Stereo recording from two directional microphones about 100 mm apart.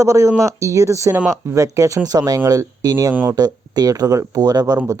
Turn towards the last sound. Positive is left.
turn(degrees=-40)  # may be behind; listen again after turning